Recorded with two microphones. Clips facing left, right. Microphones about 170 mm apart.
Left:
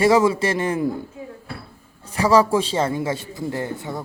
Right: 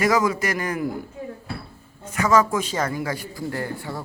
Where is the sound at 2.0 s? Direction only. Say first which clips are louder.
Left 3 dB; 30° left (ahead or behind).